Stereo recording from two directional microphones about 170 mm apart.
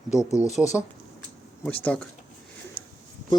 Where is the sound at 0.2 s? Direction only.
20° left (ahead or behind).